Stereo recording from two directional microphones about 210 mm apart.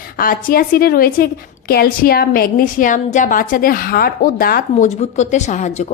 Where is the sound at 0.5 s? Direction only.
45° left (ahead or behind).